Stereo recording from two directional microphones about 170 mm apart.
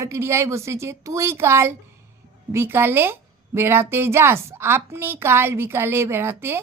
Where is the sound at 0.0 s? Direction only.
15° right (ahead or behind).